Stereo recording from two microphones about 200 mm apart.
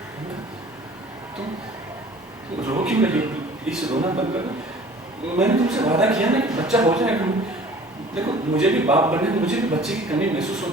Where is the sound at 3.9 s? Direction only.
30° right (ahead or behind).